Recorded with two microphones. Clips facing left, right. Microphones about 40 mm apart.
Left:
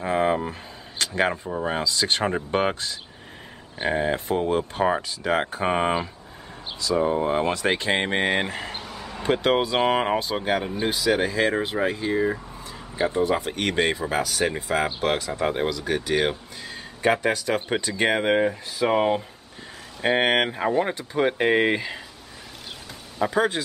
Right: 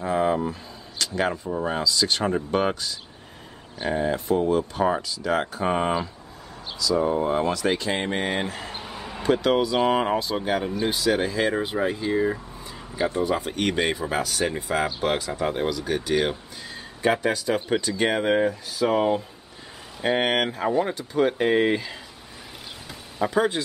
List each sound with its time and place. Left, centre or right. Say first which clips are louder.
0.0 s speech: even; left
5.7 s speech: even; left
7.2 s speech: even; left
8.8 s a sound: right 1 dB; centre
9.2 s speech: even; left
10.0 s speech: even; left
10.9 s speech: left 2 dB; centre
15.4 s speech: left 1 dB; centre
17.6 s speech: right 1 dB; centre
18.5 s speech: even; left
20.0 s speech: left 2 dB; centre
23.1 s speech: even; centre